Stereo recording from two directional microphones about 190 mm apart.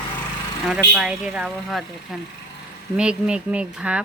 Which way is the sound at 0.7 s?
5° right (ahead or behind).